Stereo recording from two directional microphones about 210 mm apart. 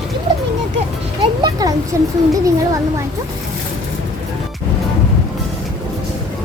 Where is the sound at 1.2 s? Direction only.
20° right (ahead or behind).